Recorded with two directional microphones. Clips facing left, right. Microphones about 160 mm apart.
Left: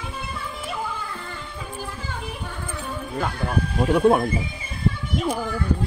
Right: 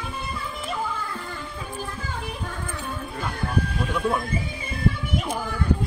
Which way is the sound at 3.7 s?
55° left (ahead or behind).